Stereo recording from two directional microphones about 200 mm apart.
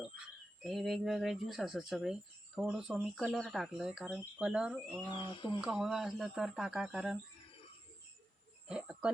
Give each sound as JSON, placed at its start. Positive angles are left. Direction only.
{"t": 0.6, "sound": "speech", "side_deg": 0}
{"t": 5.0, "sound": "speech", "side_deg": 25}
{"t": 5.5, "sound": "speech", "side_deg": -5}
{"t": 8.6, "sound": "a sound", "side_deg": -5}